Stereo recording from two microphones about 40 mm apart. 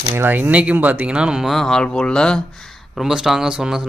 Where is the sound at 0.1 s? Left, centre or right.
Right.